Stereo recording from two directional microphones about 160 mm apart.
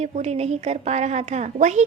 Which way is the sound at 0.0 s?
40° right (ahead or behind).